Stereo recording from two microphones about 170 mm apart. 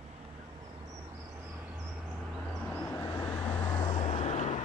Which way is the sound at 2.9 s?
20° left (ahead or behind).